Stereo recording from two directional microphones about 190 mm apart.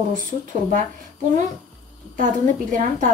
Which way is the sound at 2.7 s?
40° right (ahead or behind).